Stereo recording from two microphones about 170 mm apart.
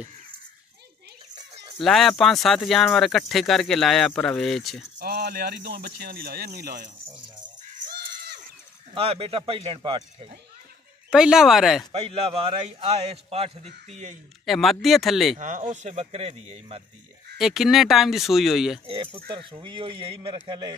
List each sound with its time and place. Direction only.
1.8 s speech: centre (ahead or behind)
4.9 s speech: 65° right (ahead or behind)
5.7 s speech: 70° right (ahead or behind)
7.7 s crow: 65° right (ahead or behind)
8.9 s a man's voice: 35° right (ahead or behind)
11.1 s speech: 5° right (ahead or behind)
11.9 s a man's voice: 35° right (ahead or behind)
14.4 s speech: centre (ahead or behind)
15.3 s a man's voice: 45° right (ahead or behind)
17.4 s speech: centre (ahead or behind)
18.9 s a man's voice: 30° right (ahead or behind)